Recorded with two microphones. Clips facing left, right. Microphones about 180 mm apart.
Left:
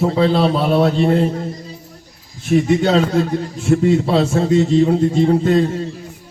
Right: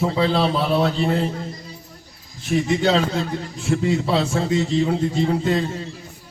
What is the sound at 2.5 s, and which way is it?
A man's voice, 50° left (ahead or behind).